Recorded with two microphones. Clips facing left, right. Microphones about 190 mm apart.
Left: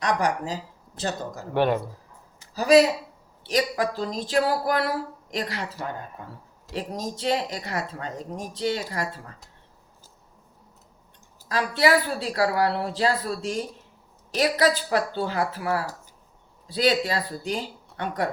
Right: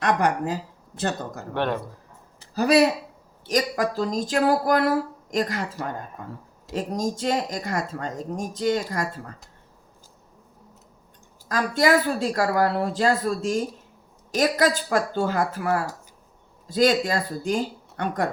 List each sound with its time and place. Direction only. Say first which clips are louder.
0.0 s speech: right 2 dB; 55° right (ahead or behind)
1.5 s speech: left 3 dB; 10° left (ahead or behind)
2.6 s speech: left 2 dB; 60° right (ahead or behind)
3.4 s speech: right 1 dB; 45° right (ahead or behind)
11.4 s speech: right 1 dB; 45° right (ahead or behind)